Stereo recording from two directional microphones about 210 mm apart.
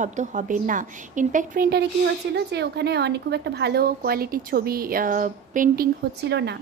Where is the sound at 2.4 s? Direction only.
50° right (ahead or behind).